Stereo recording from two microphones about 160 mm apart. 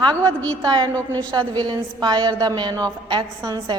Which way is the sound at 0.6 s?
30° right (ahead or behind).